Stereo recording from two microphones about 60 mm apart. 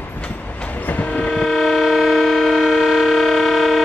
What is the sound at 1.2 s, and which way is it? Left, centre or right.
Civil defense siren, centre.